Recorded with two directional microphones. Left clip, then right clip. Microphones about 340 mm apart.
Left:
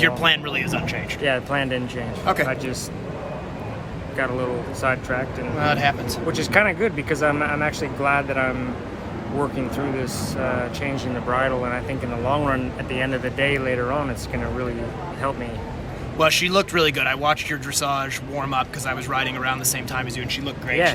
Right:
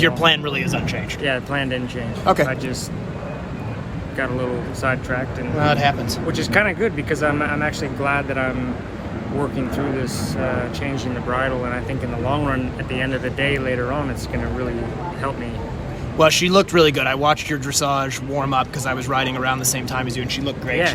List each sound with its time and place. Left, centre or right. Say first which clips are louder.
0.0 s speech: right 2 dB; centre
1.2 s speech: even; centre
2.2 s speech: right 4 dB; centre
4.2 s speech: right 1 dB; centre
5.5 s speech: right 2 dB; centre
6.2 s speech: even; centre
16.1 s speech: right 3 dB; centre